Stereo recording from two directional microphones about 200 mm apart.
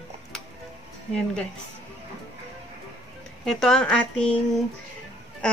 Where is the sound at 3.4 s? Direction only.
Centre (ahead or behind).